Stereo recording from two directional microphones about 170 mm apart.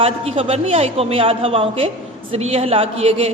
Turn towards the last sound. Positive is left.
turn(degrees=-35)  # may be behind; listen again after turning